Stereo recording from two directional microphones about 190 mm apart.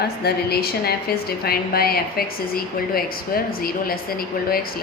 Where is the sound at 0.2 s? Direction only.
55° left (ahead or behind).